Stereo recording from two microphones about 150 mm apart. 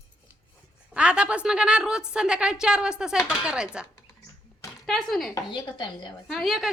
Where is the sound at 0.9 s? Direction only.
5° right (ahead or behind).